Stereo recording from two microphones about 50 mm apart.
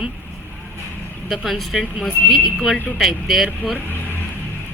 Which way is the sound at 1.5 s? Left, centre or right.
Centre.